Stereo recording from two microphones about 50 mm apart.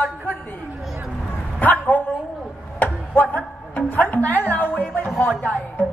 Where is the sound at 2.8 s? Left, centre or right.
Left.